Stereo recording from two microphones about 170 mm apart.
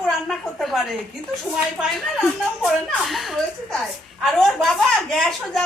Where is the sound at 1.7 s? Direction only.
Centre (ahead or behind).